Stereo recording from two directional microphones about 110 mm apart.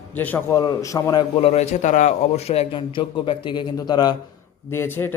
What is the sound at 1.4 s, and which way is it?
A man's voice, 70° left (ahead or behind).